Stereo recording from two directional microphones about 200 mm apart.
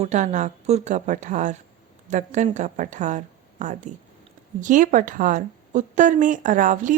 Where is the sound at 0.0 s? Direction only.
35° right (ahead or behind).